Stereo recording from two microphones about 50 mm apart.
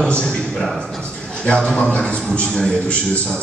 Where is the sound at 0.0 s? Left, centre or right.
Centre.